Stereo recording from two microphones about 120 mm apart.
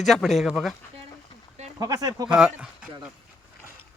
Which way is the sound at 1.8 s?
30° right (ahead or behind).